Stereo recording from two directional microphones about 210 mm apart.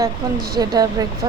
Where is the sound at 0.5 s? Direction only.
20° right (ahead or behind).